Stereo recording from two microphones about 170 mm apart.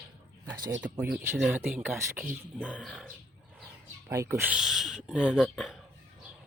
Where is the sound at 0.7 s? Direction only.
10° right (ahead or behind).